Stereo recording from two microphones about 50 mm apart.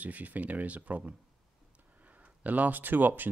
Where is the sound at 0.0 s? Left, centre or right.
Right.